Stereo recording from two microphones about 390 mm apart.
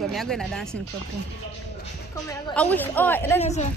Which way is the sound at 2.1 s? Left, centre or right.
Centre.